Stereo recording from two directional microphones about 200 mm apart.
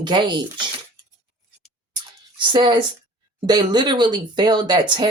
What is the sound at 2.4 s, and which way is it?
Speech, 25° right (ahead or behind).